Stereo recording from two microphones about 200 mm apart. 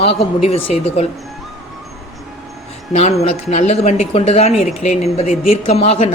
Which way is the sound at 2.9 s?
30° left (ahead or behind).